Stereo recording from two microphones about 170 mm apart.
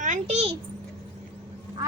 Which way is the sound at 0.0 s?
45° right (ahead or behind).